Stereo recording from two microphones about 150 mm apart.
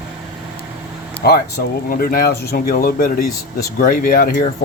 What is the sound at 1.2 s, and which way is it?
Speech, 90° left.